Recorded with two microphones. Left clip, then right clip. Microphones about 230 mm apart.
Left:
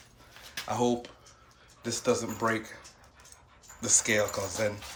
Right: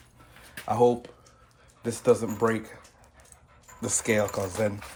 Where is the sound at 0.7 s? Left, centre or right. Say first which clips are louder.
Right 7 dB; right.